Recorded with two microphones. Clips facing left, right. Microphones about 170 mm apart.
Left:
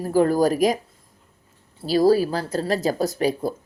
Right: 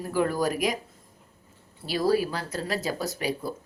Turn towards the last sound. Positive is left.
turn(degrees=40)  # may be behind; listen again after turning